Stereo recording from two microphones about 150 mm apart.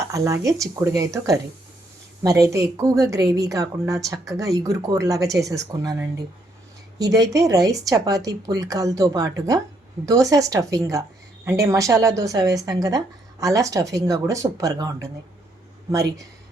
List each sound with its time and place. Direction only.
0.1 s a woman's voice: 20° right (ahead or behind)